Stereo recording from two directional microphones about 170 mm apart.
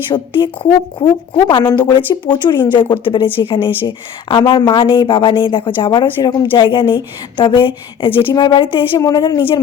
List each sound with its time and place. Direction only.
0.1 s speech: 25° left (ahead or behind)